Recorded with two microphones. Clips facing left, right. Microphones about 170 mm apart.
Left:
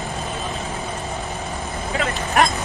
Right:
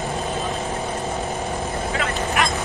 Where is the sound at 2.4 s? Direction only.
40° left (ahead or behind).